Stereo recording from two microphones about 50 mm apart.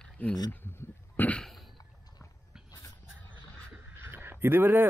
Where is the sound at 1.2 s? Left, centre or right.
Left.